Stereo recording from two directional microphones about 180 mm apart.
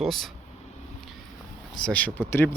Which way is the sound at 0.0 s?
Centre (ahead or behind).